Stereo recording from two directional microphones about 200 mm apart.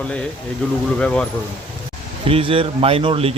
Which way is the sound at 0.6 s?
5° left (ahead or behind).